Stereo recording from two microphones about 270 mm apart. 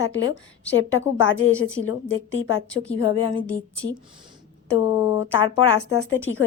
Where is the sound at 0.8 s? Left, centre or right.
Left.